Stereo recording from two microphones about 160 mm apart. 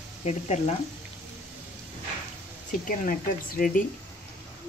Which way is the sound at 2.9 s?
60° left (ahead or behind).